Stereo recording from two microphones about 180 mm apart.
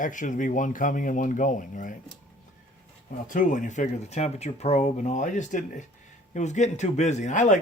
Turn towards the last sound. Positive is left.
turn(degrees=45)  # may be behind; listen again after turning